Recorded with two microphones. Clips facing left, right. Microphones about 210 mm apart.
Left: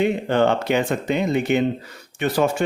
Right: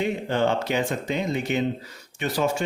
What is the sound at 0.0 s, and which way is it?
Speech, 60° left (ahead or behind).